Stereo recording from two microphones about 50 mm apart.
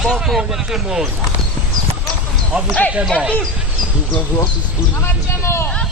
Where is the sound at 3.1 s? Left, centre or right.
Left.